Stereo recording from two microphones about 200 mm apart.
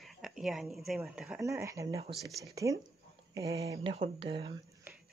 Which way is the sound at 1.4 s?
15° right (ahead or behind).